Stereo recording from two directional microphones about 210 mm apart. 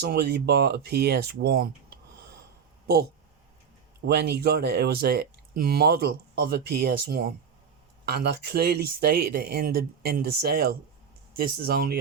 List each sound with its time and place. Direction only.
0.0 s speech: 50° right (ahead or behind)